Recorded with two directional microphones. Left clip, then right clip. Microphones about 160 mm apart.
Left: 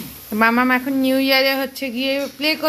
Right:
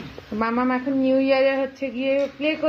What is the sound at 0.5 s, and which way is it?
Speech, 15° left (ahead or behind).